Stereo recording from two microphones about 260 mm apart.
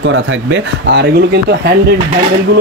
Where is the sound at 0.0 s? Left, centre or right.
Right.